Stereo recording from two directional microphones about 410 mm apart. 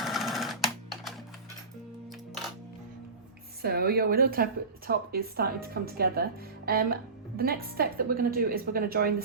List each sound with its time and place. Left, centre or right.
0.0 s sewing machine: centre
3.6 s a woman's voice: right